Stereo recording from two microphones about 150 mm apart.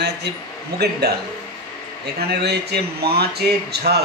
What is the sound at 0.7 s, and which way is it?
Speech, 90° right.